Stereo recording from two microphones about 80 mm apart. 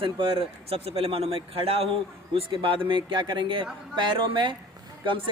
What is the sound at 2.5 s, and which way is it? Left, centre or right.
A man's voice, right.